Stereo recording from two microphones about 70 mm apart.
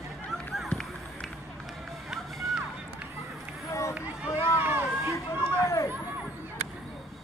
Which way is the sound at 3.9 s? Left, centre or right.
Centre.